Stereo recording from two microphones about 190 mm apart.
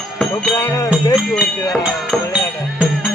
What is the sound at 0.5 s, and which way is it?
Music, 15° left (ahead or behind).